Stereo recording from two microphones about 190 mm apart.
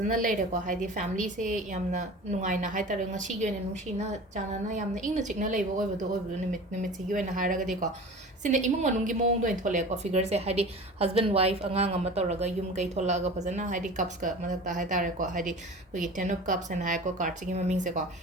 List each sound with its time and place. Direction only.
0.0 s a woman's voice: 45° right (ahead or behind)
7.1 s a woman's voice: 45° right (ahead or behind)